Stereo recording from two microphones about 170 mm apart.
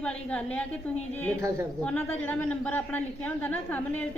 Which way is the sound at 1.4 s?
20° right (ahead or behind).